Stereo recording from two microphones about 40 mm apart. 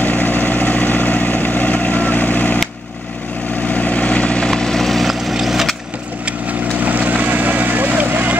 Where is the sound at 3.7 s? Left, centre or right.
Left.